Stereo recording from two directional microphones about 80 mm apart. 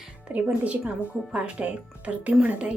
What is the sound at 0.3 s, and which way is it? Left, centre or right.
A woman's voice, centre.